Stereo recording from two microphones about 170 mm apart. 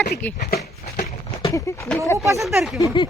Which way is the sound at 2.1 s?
15° right (ahead or behind).